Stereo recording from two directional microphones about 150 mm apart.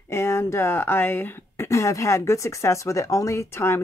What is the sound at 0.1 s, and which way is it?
Speech, 15° left (ahead or behind).